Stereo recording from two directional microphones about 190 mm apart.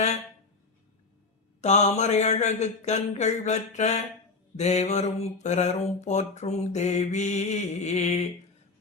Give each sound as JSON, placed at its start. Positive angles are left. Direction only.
{"t": 1.6, "sound": "mantra", "side_deg": 35}